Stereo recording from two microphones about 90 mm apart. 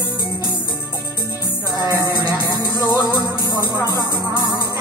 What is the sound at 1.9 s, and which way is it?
Music, 45° right (ahead or behind).